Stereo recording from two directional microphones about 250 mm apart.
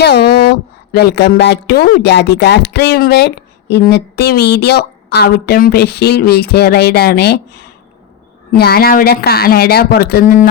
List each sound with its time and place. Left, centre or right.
0.0 s speech: left
8.5 s speech: left